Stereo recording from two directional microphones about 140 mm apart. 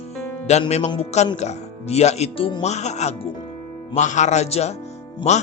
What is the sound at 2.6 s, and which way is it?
Speech, 55° left (ahead or behind).